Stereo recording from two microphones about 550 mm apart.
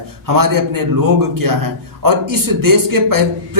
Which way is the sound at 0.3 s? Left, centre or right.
Right.